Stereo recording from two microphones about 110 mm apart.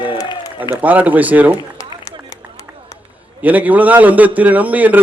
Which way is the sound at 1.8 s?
30° left (ahead or behind).